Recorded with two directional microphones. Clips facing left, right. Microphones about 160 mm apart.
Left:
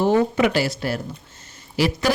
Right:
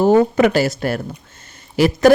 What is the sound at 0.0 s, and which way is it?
Speech, 45° right (ahead or behind).